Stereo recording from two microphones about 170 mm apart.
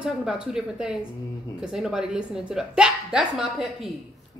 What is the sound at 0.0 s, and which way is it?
Speech, 5° right (ahead or behind).